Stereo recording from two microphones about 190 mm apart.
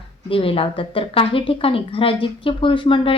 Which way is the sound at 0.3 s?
30° left (ahead or behind).